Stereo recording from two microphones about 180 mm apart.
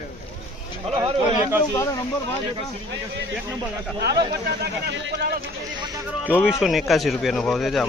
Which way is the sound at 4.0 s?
65° right (ahead or behind).